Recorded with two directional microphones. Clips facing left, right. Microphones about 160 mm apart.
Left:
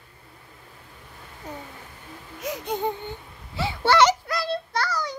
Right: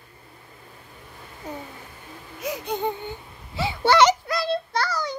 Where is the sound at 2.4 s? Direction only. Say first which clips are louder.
Right 1 dB; 5° right (ahead or behind).